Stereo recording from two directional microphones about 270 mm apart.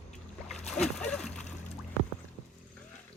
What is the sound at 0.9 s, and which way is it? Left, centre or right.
Speech, centre.